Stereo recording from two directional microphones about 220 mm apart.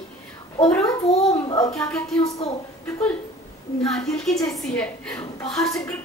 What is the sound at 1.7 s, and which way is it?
Speech, 5° left (ahead or behind).